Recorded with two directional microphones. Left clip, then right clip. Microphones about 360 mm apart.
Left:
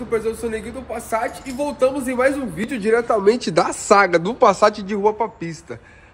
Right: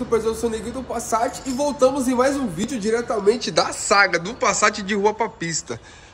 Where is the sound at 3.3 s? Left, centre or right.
Left.